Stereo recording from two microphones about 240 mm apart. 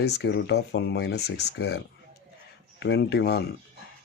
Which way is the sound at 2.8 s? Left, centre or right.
Left.